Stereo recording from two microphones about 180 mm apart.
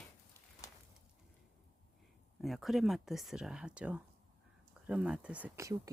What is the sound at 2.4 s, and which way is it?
Speech, centre (ahead or behind).